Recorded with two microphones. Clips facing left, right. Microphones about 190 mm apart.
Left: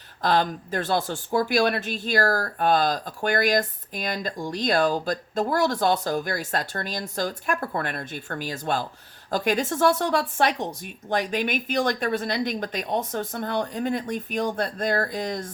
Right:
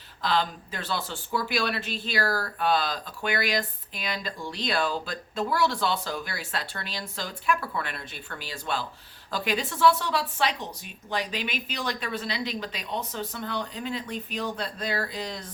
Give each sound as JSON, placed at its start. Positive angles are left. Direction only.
{"t": 0.2, "sound": "speech", "side_deg": 50}